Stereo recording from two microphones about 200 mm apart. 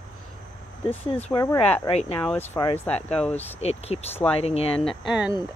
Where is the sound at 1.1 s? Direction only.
25° left (ahead or behind).